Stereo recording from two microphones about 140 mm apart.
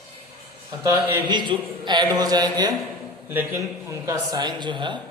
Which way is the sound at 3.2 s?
15° right (ahead or behind).